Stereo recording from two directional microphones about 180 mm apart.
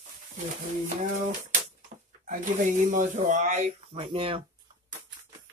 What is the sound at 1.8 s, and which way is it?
Speech, 45° right (ahead or behind).